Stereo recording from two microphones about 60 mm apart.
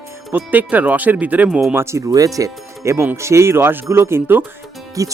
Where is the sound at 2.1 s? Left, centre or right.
Right.